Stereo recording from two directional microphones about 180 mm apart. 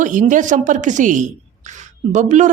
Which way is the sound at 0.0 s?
45° right (ahead or behind).